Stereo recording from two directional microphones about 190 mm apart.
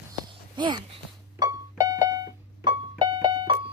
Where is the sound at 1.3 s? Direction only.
20° right (ahead or behind).